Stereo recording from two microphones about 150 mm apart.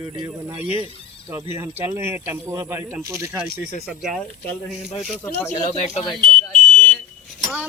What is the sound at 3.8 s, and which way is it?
Speech, centre (ahead or behind).